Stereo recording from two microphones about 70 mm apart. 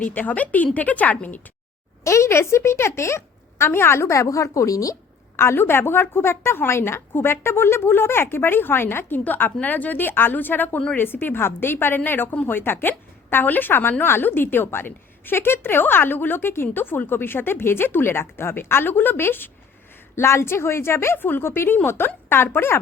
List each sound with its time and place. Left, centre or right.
0.0 s a woman's voice: left
2.0 s a woman's voice: left
5.4 s a woman's voice: left